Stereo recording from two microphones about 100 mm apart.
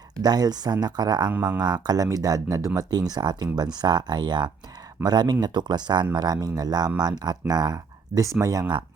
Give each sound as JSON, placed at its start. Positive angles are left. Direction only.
{"t": 0.2, "sound": "speech", "side_deg": -40}
{"t": 1.3, "sound": "speech", "side_deg": -15}
{"t": 1.6, "sound": "speech", "side_deg": -45}